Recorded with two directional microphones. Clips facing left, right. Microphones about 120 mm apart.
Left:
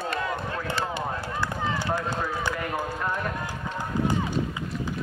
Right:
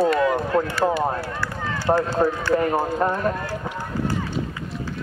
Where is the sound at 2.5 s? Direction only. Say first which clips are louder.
Right 10 dB; 40° right (ahead or behind).